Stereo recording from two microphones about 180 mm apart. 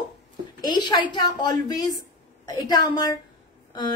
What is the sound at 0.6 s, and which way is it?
Speech, 25° left (ahead or behind).